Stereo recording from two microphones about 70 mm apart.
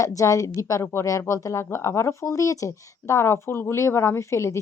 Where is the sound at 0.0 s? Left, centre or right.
Left.